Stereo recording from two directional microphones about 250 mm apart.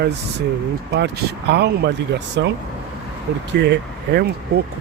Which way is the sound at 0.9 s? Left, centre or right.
Right.